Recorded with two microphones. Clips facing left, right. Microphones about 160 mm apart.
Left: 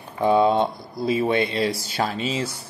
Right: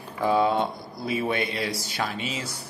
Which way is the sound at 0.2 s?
20° left (ahead or behind).